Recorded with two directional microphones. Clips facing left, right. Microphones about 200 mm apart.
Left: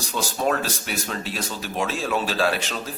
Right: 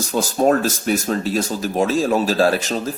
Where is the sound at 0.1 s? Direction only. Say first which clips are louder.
Right 7 dB; 45° right (ahead or behind).